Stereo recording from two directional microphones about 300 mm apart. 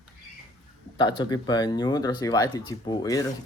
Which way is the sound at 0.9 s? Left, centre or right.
Centre.